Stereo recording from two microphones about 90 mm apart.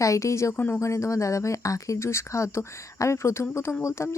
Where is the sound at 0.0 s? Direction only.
35° left (ahead or behind).